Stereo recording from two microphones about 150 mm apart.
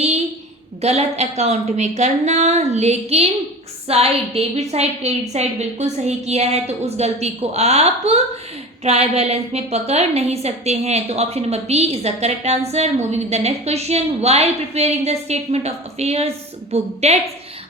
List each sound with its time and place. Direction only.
0.8 s a woman's voice: 45° right (ahead or behind)